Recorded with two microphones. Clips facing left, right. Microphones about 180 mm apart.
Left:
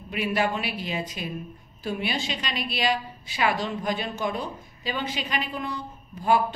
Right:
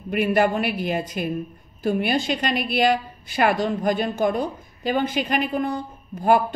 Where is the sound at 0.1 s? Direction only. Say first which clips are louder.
Right 6 dB; 55° right (ahead or behind).